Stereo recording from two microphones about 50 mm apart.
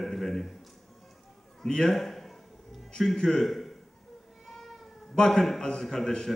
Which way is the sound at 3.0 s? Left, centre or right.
Centre.